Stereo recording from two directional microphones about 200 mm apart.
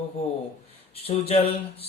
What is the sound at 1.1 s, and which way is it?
Speech, 30° left (ahead or behind).